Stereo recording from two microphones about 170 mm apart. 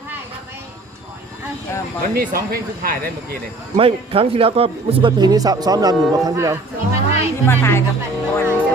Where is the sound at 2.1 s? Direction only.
60° right (ahead or behind).